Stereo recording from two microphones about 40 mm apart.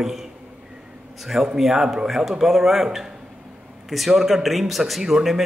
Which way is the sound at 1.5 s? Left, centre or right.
Centre.